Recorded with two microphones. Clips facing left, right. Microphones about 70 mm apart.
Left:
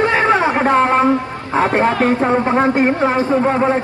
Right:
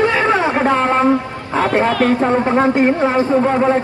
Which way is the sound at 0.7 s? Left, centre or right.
Left.